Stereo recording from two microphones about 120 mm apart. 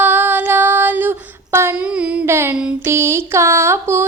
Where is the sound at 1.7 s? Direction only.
10° right (ahead or behind).